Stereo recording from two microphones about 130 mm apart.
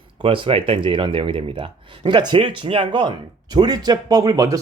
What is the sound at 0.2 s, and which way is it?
Speech, 40° right (ahead or behind).